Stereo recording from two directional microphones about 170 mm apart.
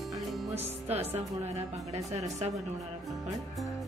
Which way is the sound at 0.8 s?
40° right (ahead or behind).